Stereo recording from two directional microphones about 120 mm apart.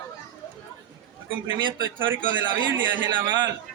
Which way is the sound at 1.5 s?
40° right (ahead or behind).